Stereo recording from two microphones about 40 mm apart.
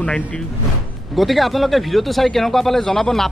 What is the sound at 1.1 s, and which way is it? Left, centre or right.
A man's voice, centre.